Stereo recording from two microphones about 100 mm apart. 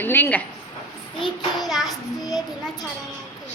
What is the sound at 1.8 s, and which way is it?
A child's voice, 40° left (ahead or behind).